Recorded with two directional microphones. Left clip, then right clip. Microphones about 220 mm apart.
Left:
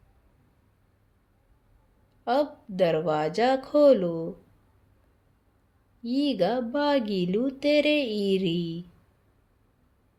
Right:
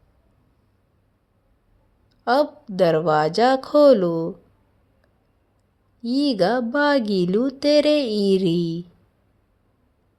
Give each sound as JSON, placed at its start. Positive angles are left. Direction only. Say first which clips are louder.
{"t": 2.2, "sound": "speech", "louder": "right 6 dB", "side_deg": -25}
{"t": 6.0, "sound": "speech", "louder": "right 5 dB", "side_deg": -30}